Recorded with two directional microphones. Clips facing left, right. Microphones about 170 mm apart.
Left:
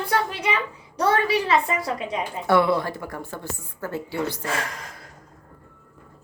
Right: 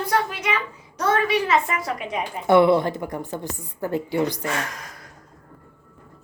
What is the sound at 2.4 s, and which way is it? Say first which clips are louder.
A woman's voice: right 4 dB; 20° right (ahead or behind).